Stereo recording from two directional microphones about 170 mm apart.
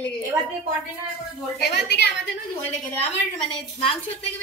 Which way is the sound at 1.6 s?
70° left (ahead or behind).